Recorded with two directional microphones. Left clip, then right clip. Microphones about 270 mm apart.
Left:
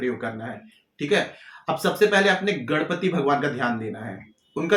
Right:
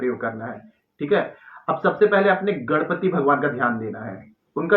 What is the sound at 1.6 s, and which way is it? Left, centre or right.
A man's voice, left.